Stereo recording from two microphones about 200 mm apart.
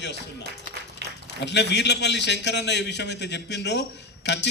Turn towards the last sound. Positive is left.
turn(degrees=60)  # may be behind; listen again after turning